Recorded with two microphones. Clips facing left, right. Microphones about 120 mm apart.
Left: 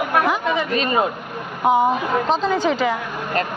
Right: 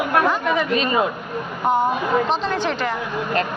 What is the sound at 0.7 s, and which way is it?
Speech, 40° left (ahead or behind).